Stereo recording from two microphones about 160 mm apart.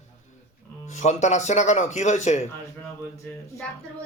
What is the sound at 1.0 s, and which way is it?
A man's voice, 45° left (ahead or behind).